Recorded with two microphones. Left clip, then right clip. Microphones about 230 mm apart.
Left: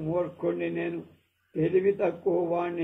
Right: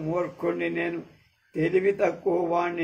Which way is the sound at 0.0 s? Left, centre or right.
Right.